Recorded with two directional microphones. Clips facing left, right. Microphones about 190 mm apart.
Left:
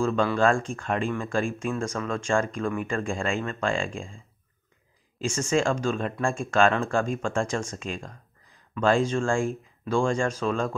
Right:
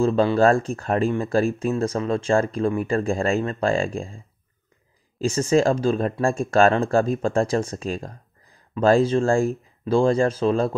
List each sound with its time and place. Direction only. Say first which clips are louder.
0.0 s speech: right 5 dB; 30° right (ahead or behind)
5.3 s speech: right 6 dB; 35° right (ahead or behind)